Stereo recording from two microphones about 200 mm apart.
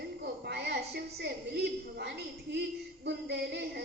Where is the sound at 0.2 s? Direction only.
55° right (ahead or behind).